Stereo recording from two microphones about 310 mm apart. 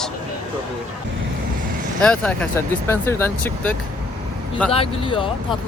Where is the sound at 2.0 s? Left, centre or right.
Centre.